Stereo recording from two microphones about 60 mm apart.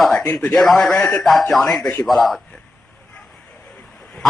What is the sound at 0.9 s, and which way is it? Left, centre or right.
Speech, centre.